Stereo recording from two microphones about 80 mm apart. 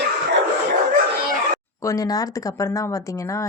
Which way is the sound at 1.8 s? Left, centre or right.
Left.